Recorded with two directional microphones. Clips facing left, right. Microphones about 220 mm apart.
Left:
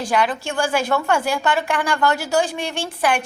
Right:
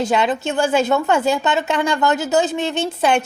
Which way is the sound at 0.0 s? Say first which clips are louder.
Right 3 dB; 25° right (ahead or behind).